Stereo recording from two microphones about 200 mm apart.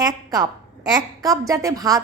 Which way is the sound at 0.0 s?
20° right (ahead or behind).